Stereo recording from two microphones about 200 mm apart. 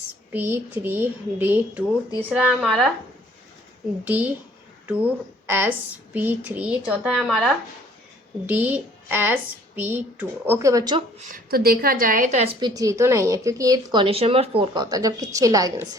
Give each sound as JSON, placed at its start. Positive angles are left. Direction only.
{"t": 0.3, "sound": "a woman's voice", "side_deg": -10}
{"t": 4.0, "sound": "speech", "side_deg": -10}
{"t": 11.3, "sound": "a woman's voice", "side_deg": -45}